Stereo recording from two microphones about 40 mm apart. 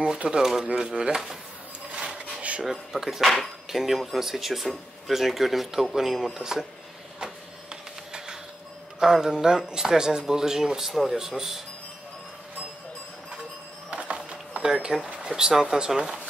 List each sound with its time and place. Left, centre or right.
0.0 s speech: right
2.0 s a sound: right
2.6 s speech: centre
7.7 s printer: centre
9.0 s speech: centre
13.8 s a sound: right
14.7 s speech: right